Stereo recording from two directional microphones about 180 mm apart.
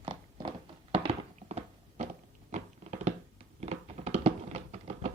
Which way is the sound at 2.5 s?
40° right (ahead or behind).